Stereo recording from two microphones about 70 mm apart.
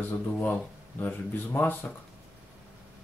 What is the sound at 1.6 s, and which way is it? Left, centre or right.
Speech, left.